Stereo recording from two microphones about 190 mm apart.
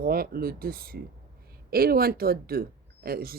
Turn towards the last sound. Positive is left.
turn(degrees=-50)  # may be behind; listen again after turning